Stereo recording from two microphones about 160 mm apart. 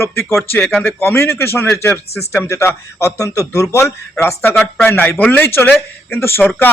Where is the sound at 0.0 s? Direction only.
15° left (ahead or behind).